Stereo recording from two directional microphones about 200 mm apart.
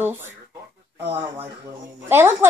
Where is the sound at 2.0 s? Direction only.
10° right (ahead or behind).